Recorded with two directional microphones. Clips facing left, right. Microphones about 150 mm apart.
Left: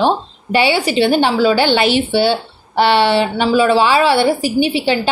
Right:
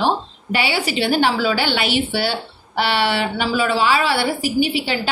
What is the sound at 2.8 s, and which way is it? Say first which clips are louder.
A woman's voice: left 7 dB; 25° left (ahead or behind).